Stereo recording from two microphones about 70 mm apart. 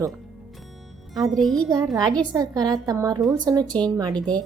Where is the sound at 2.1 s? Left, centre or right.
Right.